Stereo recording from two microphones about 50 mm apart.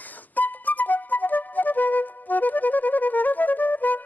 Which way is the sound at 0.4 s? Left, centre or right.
Left.